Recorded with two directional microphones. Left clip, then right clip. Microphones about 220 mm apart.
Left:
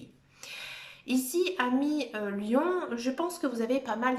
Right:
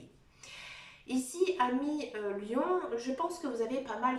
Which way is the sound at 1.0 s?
45° left (ahead or behind).